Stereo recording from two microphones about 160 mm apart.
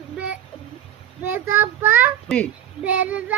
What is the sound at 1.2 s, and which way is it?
Child singing, 10° right (ahead or behind).